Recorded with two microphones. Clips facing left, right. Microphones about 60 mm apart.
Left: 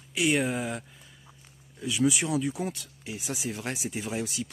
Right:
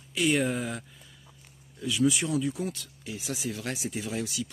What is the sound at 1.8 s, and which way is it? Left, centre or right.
Speech, centre.